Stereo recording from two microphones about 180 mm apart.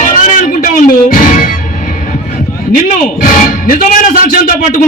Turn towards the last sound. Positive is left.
turn(degrees=50)  # may be behind; listen again after turning